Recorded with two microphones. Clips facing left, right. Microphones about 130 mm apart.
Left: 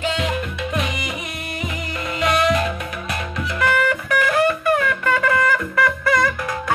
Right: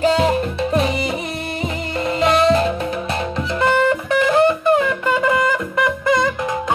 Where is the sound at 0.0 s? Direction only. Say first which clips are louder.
Right 7 dB; 35° right (ahead or behind).